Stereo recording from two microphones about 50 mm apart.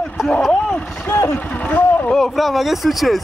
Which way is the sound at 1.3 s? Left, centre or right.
Left.